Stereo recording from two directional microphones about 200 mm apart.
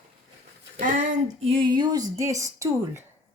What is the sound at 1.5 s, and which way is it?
A woman's voice, 25° right (ahead or behind).